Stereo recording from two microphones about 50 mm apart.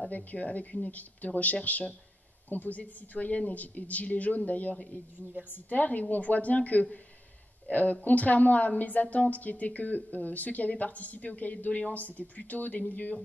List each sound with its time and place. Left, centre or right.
0.1 s a woman's voice: left